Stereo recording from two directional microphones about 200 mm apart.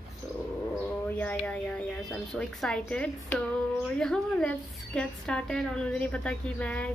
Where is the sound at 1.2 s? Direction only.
10° left (ahead or behind).